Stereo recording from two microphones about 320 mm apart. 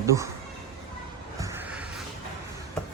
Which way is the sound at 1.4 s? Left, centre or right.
Centre.